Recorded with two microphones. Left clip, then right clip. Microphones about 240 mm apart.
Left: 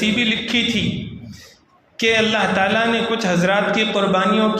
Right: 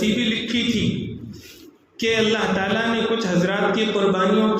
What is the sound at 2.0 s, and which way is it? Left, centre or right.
A man's voice, left.